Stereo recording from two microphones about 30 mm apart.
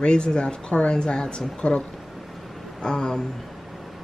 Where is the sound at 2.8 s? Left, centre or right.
Left.